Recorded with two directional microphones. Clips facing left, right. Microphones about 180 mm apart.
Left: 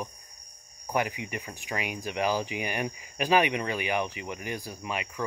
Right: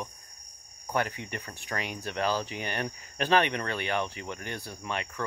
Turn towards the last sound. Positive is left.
turn(degrees=10)  # may be behind; listen again after turning